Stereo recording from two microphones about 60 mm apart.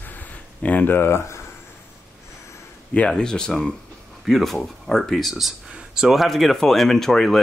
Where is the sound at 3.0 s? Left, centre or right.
Centre.